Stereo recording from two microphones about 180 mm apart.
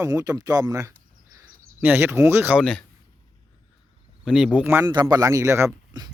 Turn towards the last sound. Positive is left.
turn(degrees=-20)  # may be behind; listen again after turning